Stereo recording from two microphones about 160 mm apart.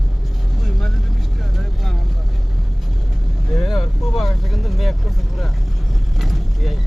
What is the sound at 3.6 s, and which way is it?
Vehicle, centre (ahead or behind).